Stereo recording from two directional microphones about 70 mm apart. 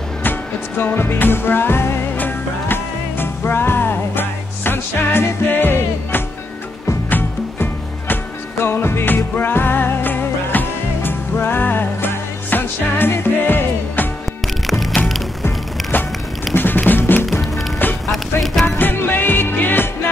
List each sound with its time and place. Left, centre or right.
0.2 s music: left
14.7 s music: centre
15.4 s music: left
17.3 s music: centre
18.8 s music: left